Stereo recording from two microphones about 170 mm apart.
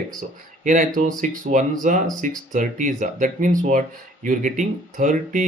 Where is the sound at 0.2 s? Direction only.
45° right (ahead or behind).